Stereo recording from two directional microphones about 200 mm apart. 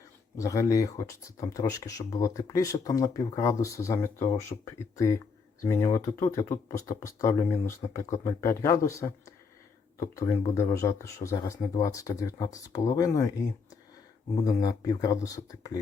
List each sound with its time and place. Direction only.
0.3 s speech: 15° left (ahead or behind)
14.4 s speech: 20° left (ahead or behind)